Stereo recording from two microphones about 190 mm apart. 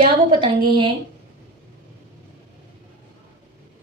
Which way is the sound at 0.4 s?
25° right (ahead or behind).